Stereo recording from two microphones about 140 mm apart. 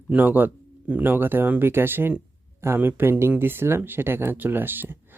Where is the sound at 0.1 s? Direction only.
15° right (ahead or behind).